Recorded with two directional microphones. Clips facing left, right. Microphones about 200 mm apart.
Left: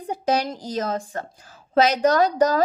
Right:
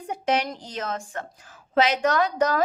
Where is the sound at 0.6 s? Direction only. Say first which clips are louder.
Left 6 dB; 40° left (ahead or behind).